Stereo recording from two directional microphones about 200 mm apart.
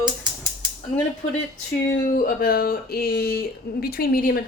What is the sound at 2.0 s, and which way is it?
Speech, 45° left (ahead or behind).